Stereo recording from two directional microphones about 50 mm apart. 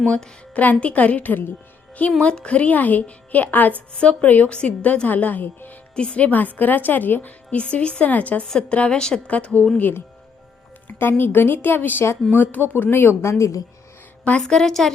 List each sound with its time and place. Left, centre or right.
0.0 s a woman's voice: centre
0.5 s a woman's voice: left
3.9 s a woman's voice: left
6.0 s a woman's voice: left
8.4 s a woman's voice: centre
9.3 s a woman's voice: left
10.9 s a woman's voice: left
12.6 s a woman's voice: left
14.4 s a woman's voice: centre